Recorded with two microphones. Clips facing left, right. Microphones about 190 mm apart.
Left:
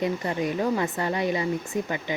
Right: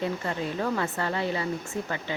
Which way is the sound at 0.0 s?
15° left (ahead or behind).